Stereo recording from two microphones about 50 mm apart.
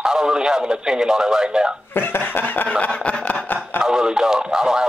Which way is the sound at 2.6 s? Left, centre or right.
Left.